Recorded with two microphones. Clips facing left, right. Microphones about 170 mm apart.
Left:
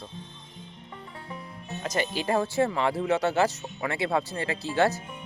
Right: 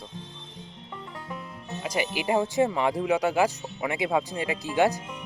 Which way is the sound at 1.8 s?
10° right (ahead or behind).